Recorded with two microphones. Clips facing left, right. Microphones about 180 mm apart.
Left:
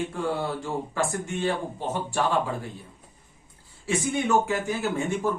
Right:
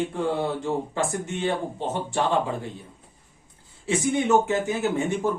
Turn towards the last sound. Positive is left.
turn(degrees=-20)  # may be behind; listen again after turning